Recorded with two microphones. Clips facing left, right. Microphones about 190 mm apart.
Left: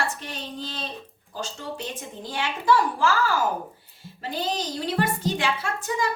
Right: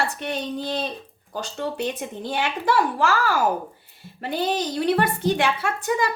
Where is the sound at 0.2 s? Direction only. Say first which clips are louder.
Right 7 dB; 65° right (ahead or behind).